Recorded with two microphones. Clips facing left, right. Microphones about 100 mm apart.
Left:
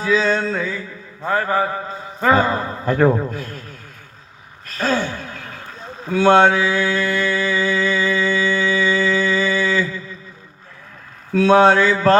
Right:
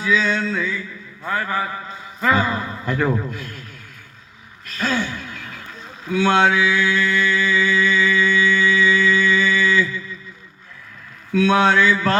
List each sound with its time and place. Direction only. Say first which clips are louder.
0.0 s mantra: left 2 dB; 35° left (ahead or behind)
4.6 s a sound: left 3 dB; 35° left (ahead or behind)
11.3 s mantra: left 4 dB; 35° left (ahead or behind)